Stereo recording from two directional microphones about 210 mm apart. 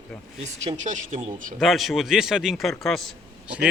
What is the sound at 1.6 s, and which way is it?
A man's voice, centre (ahead or behind).